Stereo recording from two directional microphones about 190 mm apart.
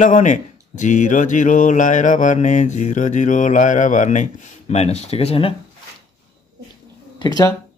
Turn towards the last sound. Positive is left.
turn(degrees=20)  # may be behind; listen again after turning